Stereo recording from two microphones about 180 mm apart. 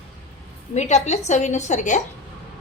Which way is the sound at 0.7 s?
40° left (ahead or behind).